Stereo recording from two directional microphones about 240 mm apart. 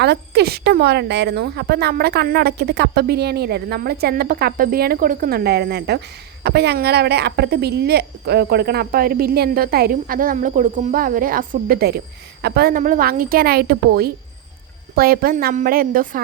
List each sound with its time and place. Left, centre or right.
0.0 s speech: right